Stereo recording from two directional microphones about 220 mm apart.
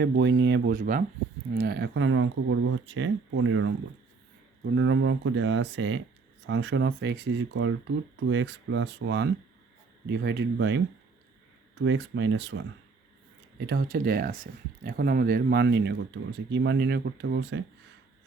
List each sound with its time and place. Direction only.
0.0 s speech: 55° right (ahead or behind)
0.8 s speech: 35° right (ahead or behind); by 12.6 s 55° right (ahead or behind)
13.7 s speech: 45° right (ahead or behind)